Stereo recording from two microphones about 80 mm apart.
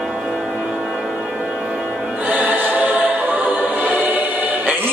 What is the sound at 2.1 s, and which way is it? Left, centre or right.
Choir, right.